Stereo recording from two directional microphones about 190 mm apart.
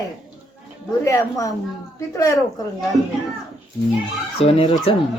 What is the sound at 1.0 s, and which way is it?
A man's voice, 15° left (ahead or behind).